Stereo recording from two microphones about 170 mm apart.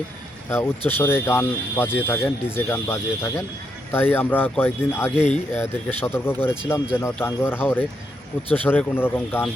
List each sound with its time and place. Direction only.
0.9 s speech: 15° left (ahead or behind)
5.1 s speech: 40° left (ahead or behind)
5.5 s speech: 15° left (ahead or behind)